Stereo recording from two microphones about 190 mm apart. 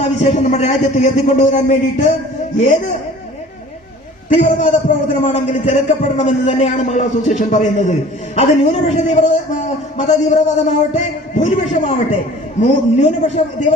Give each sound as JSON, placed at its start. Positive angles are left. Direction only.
{"t": 0.0, "sound": "speech", "side_deg": 35}
{"t": 4.3, "sound": "speech", "side_deg": 35}